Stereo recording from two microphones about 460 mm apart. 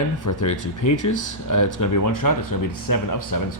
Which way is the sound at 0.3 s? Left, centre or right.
Left.